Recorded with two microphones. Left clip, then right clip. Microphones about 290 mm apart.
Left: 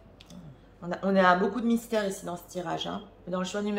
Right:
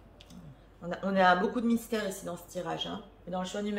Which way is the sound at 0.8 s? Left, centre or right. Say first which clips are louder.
Left 2 dB; centre.